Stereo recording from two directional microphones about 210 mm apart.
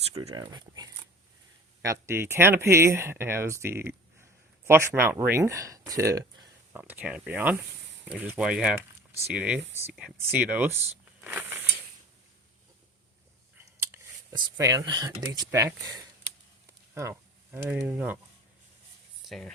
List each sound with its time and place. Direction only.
0.1 s speech: 20° right (ahead or behind)
11.2 s a sound: 10° right (ahead or behind)
13.7 s whispering: 10° right (ahead or behind)
14.5 s speech: 15° right (ahead or behind)
19.2 s speech: centre (ahead or behind)